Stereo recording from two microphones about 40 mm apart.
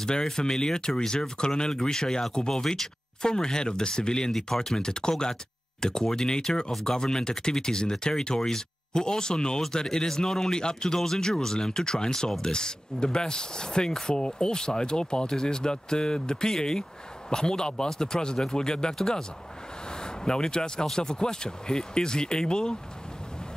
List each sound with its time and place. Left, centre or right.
0.0 s speech: centre
19.9 s a sound: centre
20.8 s speech: centre